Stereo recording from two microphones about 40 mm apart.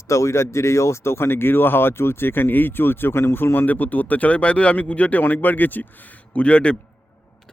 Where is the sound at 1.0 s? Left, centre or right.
Left.